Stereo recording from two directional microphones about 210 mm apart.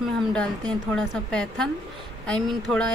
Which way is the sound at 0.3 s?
5° left (ahead or behind).